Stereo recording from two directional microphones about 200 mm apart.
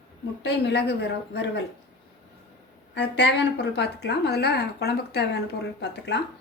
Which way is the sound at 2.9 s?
60° left (ahead or behind).